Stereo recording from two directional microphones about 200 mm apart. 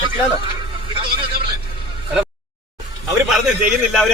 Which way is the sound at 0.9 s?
25° right (ahead or behind).